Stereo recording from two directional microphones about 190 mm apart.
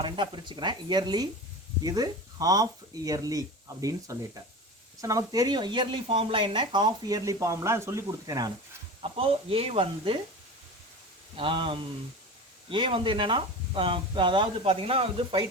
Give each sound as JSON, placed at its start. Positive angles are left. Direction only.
{"t": 0.0, "sound": "speech", "side_deg": -25}
{"t": 11.3, "sound": "speech", "side_deg": -25}